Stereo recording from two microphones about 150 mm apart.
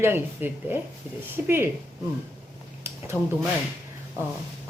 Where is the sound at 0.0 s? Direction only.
15° right (ahead or behind).